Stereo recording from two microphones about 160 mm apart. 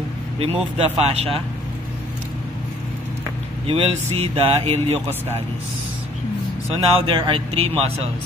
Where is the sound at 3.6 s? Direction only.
40° right (ahead or behind).